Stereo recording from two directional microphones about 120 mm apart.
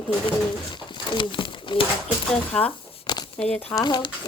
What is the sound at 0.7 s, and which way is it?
Pigeon, 45° left (ahead or behind).